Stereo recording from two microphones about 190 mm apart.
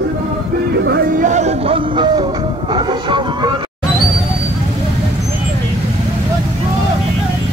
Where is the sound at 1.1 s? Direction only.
40° right (ahead or behind); by 3.5 s 25° right (ahead or behind).